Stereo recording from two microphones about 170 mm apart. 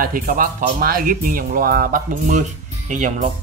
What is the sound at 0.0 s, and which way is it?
Speech, 55° right (ahead or behind).